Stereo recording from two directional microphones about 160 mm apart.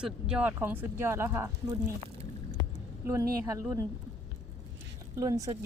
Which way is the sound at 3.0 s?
20° right (ahead or behind).